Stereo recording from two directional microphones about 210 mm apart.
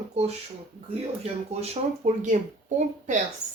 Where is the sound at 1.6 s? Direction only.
30° right (ahead or behind).